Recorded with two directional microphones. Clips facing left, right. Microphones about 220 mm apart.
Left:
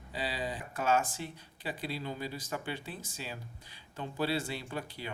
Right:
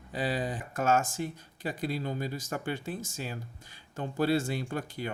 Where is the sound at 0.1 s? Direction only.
50° right (ahead or behind).